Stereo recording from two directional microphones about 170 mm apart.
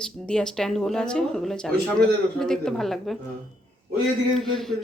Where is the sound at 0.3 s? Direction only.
5° left (ahead or behind).